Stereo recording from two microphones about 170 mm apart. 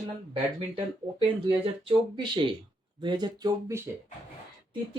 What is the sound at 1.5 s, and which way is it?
Speech, 30° right (ahead or behind).